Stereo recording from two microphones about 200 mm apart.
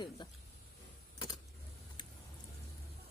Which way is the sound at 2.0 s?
20° left (ahead or behind).